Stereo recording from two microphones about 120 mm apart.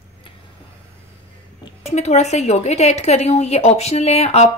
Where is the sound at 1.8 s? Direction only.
65° left (ahead or behind).